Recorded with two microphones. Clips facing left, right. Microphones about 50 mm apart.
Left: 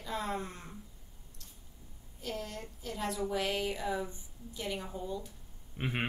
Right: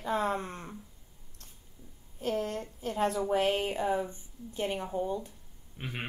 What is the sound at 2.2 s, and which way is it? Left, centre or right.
A woman's voice, right.